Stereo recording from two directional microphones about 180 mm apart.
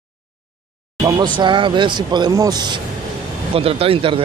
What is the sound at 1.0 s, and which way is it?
Speech, 25° right (ahead or behind).